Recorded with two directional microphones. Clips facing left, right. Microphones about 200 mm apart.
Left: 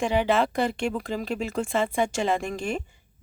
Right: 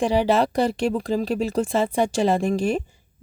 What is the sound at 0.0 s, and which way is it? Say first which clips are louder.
Speech: right 3 dB; 35° right (ahead or behind).